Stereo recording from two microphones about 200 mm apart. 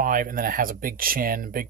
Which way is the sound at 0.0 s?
45° right (ahead or behind).